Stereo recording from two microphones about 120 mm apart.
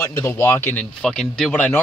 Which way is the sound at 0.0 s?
20° left (ahead or behind).